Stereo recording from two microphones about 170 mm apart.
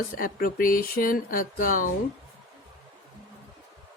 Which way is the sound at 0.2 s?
55° left (ahead or behind).